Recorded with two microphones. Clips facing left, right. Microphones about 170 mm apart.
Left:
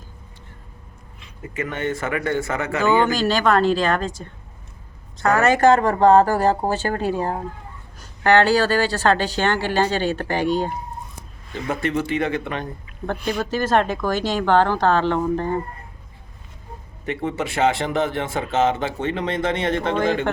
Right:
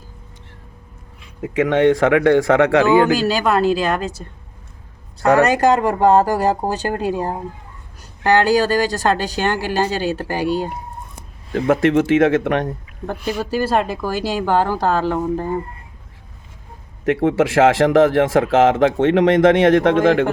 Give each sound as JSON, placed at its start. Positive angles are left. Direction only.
{"t": 1.4, "sound": "speech", "side_deg": -90}
{"t": 2.8, "sound": "speech", "side_deg": -10}
{"t": 5.5, "sound": "speech", "side_deg": -10}
{"t": 11.7, "sound": "speech", "side_deg": -90}
{"t": 13.1, "sound": "speech", "side_deg": -5}
{"t": 17.1, "sound": "speech", "side_deg": -90}